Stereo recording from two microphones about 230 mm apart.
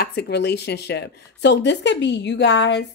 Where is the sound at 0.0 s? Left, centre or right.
Left.